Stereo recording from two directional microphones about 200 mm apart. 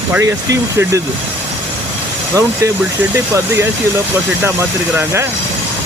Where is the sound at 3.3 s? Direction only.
15° right (ahead or behind).